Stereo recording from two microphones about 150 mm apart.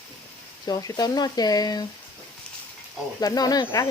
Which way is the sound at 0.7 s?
25° left (ahead or behind).